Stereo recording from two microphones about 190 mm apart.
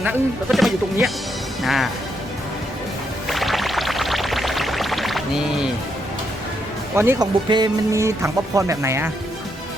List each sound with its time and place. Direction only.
0.0 s speech: 5° right (ahead or behind)
3.2 s music: centre (ahead or behind)
6.9 s speech: 15° right (ahead or behind)